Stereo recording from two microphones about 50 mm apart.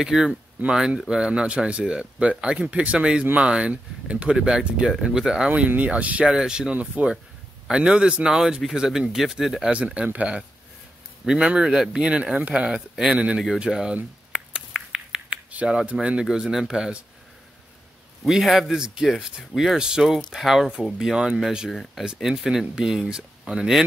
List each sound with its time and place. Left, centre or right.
0.0 s speech: centre
5.9 s speech: right
6.2 s speech: centre
9.7 s speech: right
11.2 s speech: centre
13.7 s speech: centre
14.3 s finger snapping: centre
15.6 s speech: centre
18.2 s speech: centre